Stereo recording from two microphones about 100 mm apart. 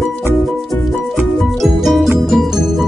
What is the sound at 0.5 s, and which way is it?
Music, centre (ahead or behind).